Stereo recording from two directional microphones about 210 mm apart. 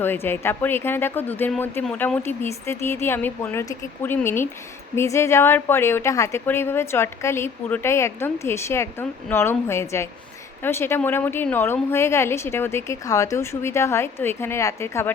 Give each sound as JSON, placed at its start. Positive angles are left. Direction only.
{"t": 0.0, "sound": "speech", "side_deg": 10}